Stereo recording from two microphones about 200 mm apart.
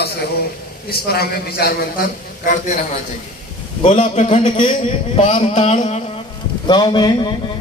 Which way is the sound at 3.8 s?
35° left (ahead or behind).